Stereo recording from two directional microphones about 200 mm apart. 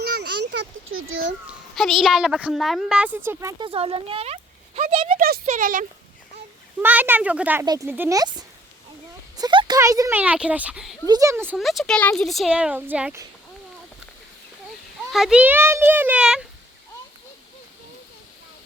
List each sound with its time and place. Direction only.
0.0 s a sound: 55° right (ahead or behind); by 1.2 s 90° right
1.5 s speech: centre (ahead or behind); by 3.7 s 15° right (ahead or behind)
3.7 s speech: 25° right (ahead or behind)
5.1 s speech: 45° right (ahead or behind)
6.8 s speech: 10° right (ahead or behind)
11.0 s speech: 15° right (ahead or behind)
11.5 s speech: centre (ahead or behind)
15.1 s speech: 5° right (ahead or behind)